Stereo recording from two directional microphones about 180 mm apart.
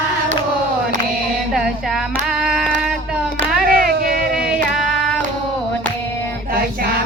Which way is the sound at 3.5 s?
55° right (ahead or behind).